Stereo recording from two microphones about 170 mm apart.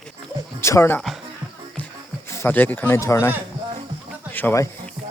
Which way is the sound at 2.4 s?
10° left (ahead or behind).